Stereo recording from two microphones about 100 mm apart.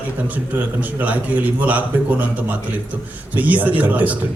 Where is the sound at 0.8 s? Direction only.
15° right (ahead or behind).